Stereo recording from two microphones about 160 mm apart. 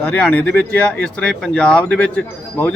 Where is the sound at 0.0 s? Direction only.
5° left (ahead or behind).